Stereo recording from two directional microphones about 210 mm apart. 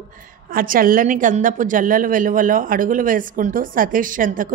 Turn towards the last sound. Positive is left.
turn(degrees=-40)  # may be behind; listen again after turning